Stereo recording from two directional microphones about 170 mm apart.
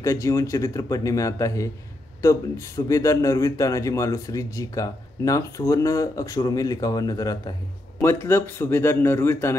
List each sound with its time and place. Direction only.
0.0 s a man's voice: 20° left (ahead or behind)